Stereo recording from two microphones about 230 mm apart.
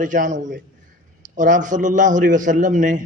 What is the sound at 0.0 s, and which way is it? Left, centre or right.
A man's voice, right.